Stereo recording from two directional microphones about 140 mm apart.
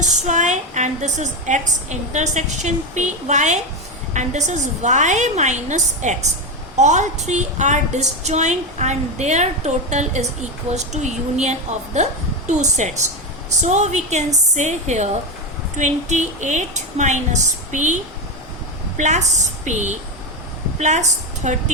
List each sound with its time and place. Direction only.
0.0 s a woman's voice: 55° right (ahead or behind)
18.9 s a woman's voice: 60° right (ahead or behind)